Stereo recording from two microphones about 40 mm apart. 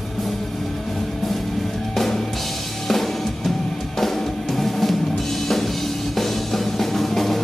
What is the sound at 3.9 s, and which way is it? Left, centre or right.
Music, centre.